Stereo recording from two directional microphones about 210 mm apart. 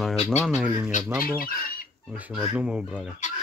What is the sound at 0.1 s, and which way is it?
Speech, 30° left (ahead or behind).